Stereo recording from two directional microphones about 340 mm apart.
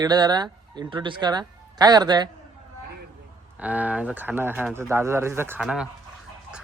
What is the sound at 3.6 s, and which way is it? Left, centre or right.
Speech, centre.